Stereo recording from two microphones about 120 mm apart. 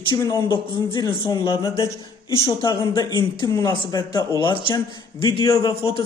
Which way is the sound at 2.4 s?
40° left (ahead or behind).